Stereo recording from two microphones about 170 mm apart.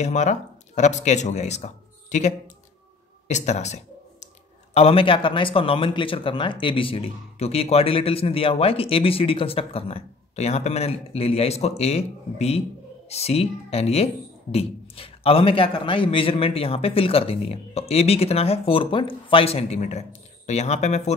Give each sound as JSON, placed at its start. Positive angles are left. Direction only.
{"t": 0.0, "sound": "speech", "side_deg": 45}
{"t": 3.3, "sound": "a sound", "side_deg": 40}
{"t": 4.7, "sound": "speech", "side_deg": 35}